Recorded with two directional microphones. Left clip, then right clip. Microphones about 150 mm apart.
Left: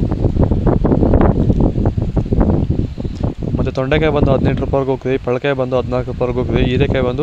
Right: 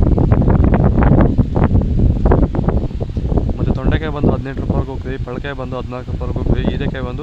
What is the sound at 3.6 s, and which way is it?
Speech, 30° left (ahead or behind).